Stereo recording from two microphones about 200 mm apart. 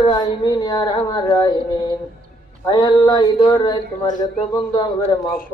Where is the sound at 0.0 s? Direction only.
20° left (ahead or behind).